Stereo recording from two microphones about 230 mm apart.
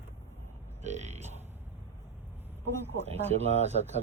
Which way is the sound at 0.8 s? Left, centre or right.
Right.